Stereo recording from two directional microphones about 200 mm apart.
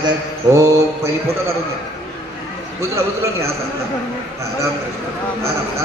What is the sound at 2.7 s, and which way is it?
Speech, 15° right (ahead or behind).